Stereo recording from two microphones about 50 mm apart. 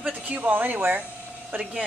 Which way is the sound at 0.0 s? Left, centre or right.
Right.